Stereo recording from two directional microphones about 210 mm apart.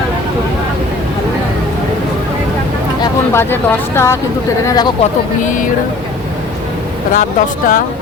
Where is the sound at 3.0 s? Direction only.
10° left (ahead or behind).